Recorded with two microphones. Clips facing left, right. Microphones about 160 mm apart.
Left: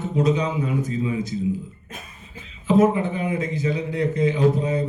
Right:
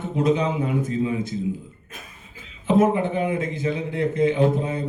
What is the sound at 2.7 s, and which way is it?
Speech, 55° right (ahead or behind).